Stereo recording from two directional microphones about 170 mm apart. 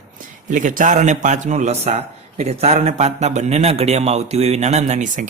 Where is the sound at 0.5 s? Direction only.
50° right (ahead or behind).